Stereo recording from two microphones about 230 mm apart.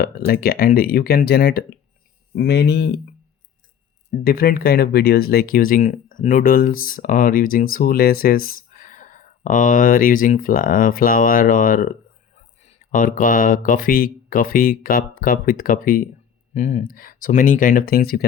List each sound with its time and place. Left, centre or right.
0.0 s speech: left
4.2 s speech: left